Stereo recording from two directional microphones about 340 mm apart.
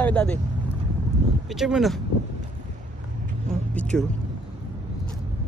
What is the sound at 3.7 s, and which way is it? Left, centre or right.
Speech, centre.